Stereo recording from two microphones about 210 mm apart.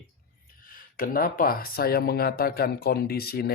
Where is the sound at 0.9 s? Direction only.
40° left (ahead or behind).